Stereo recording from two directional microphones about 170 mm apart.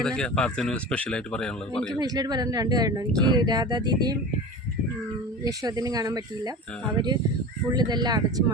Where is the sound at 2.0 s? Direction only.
25° right (ahead or behind).